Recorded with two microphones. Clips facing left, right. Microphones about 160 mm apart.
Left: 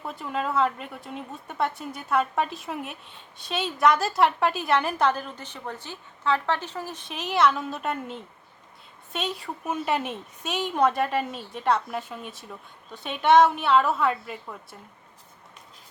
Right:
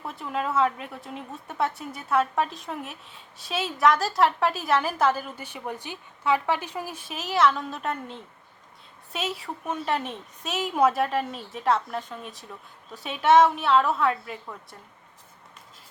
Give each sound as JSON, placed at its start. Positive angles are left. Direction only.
{"t": 0.0, "sound": "speech", "side_deg": 0}